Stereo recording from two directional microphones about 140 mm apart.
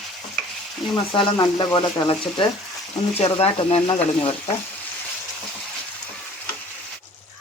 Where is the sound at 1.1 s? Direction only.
30° left (ahead or behind).